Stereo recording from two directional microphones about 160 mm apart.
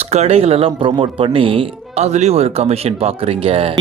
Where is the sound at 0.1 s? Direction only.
40° right (ahead or behind).